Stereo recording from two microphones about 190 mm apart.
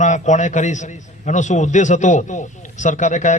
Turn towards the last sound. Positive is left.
turn(degrees=40)  # may be behind; listen again after turning